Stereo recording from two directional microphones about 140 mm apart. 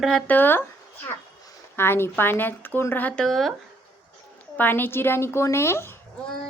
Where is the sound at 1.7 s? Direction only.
15° left (ahead or behind); by 3.5 s centre (ahead or behind).